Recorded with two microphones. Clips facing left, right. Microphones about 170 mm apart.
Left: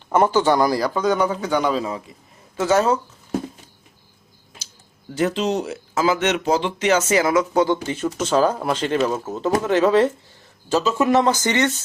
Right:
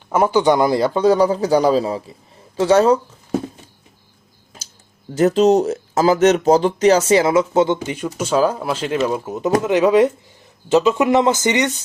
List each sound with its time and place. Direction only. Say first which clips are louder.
0.1 s a man's voice: right 2 dB; 10° right (ahead or behind); by 3.0 s 30° right (ahead or behind)
5.1 s speech: right 8 dB; 40° right (ahead or behind); by 11.8 s 15° right (ahead or behind)